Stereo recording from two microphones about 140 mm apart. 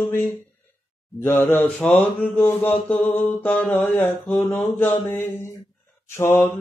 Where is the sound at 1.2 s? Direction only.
15° left (ahead or behind).